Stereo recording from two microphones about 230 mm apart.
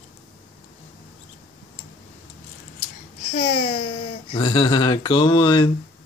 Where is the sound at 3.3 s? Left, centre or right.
Left.